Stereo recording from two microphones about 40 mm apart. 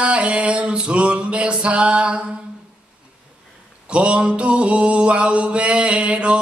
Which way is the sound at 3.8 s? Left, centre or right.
Right.